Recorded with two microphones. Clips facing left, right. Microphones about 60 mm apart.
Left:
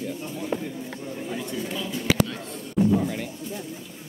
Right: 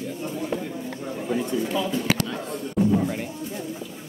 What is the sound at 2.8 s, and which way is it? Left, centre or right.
Music, centre.